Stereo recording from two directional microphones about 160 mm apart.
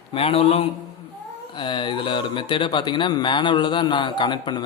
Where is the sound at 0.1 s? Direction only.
35° left (ahead or behind).